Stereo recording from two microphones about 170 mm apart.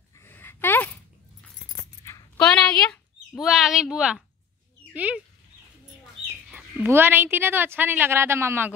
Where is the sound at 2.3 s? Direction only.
5° left (ahead or behind).